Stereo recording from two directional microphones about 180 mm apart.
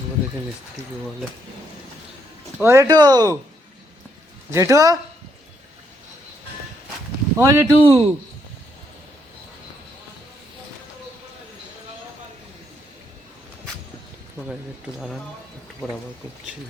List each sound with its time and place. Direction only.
2.6 s speech: 15° right (ahead or behind)
4.5 s speech: 15° right (ahead or behind)
7.3 s speech: 15° right (ahead or behind)
14.9 s speech: centre (ahead or behind)